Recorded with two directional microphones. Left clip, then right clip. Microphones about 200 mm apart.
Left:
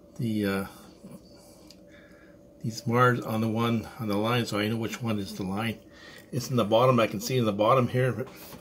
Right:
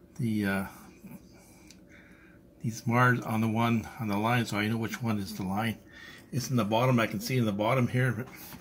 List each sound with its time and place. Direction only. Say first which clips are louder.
0.2 s speech: left 2 dB; centre (ahead or behind)
2.7 s speech: left 2 dB; centre (ahead or behind)